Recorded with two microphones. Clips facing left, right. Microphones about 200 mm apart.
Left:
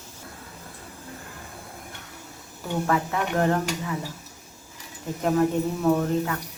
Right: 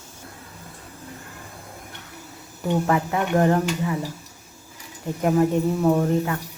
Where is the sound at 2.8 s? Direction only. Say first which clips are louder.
Right 3 dB; 15° right (ahead or behind).